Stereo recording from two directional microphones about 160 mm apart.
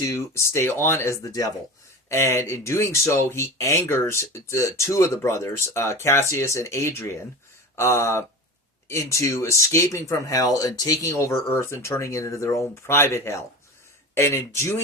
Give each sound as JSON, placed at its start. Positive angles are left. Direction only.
{"t": 0.0, "sound": "speech", "side_deg": 20}